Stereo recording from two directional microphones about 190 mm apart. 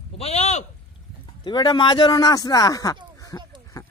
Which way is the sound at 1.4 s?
25° left (ahead or behind).